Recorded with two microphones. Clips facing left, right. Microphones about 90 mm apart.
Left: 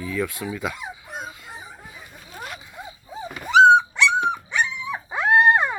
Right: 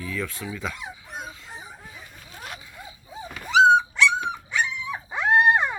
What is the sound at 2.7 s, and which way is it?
Dog, 20° left (ahead or behind).